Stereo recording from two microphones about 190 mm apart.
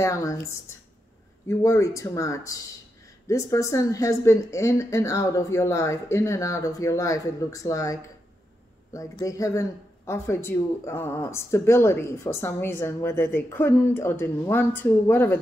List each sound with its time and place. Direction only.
0.0 s speech: 15° left (ahead or behind)
1.5 s speech: 15° left (ahead or behind)